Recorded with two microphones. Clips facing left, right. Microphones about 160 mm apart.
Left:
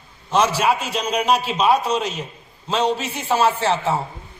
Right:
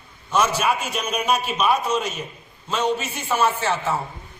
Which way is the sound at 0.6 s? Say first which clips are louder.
Left 3 dB; 30° left (ahead or behind).